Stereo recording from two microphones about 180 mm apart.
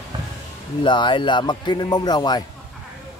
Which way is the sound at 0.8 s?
25° left (ahead or behind).